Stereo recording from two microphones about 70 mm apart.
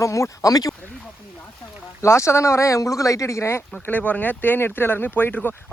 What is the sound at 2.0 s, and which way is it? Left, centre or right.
Speech, left.